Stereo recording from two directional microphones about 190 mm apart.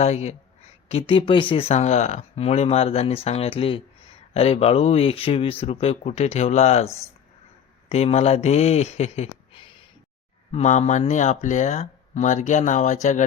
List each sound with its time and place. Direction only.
0.0 s speech: 35° left (ahead or behind)
6.8 s speech: 15° left (ahead or behind)
7.9 s speech: 35° left (ahead or behind)